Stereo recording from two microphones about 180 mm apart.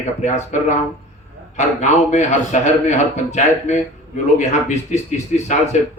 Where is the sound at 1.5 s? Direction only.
40° left (ahead or behind).